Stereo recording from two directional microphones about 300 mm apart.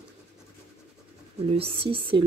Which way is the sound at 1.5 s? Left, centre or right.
Centre.